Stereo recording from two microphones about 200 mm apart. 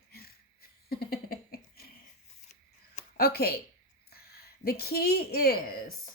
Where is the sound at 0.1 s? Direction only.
50° left (ahead or behind).